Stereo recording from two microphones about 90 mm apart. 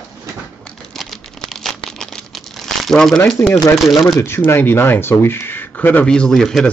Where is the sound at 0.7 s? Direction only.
5° left (ahead or behind).